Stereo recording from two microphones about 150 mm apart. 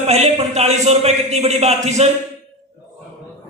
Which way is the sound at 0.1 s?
45° right (ahead or behind).